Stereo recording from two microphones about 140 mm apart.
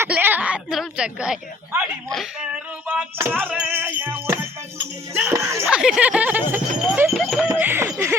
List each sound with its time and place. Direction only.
0.0 s a sound: 15° right (ahead or behind)
2.0 s speech: centre (ahead or behind)
2.8 s music: 15° right (ahead or behind)
5.1 s speech: 15° right (ahead or behind)
5.6 s a sound: 5° right (ahead or behind)
6.8 s clip-clop: 10° right (ahead or behind)
7.2 s music: centre (ahead or behind)
7.5 s snicker: 15° right (ahead or behind)